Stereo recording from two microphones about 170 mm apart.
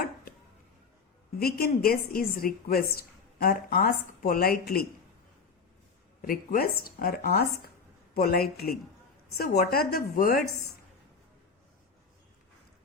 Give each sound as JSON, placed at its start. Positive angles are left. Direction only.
{"t": 1.4, "sound": "a woman's voice", "side_deg": 65}
{"t": 6.2, "sound": "a woman's voice", "side_deg": 60}